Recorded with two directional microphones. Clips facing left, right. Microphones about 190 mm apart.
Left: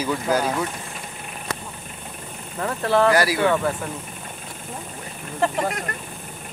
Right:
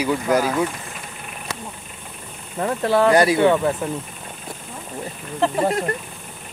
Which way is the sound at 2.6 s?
15° right (ahead or behind).